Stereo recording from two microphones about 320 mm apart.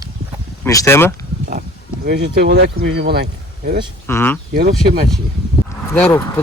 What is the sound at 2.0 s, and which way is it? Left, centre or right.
Speech, right.